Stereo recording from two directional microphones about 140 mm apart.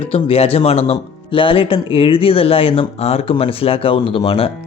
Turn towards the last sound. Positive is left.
turn(degrees=40)  # may be behind; listen again after turning